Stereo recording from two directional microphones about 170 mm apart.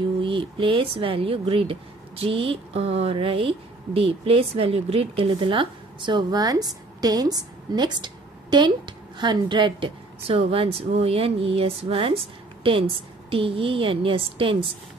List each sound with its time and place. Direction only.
0.2 s speech: 30° right (ahead or behind)